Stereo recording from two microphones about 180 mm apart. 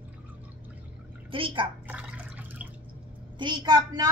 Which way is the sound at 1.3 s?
30° right (ahead or behind).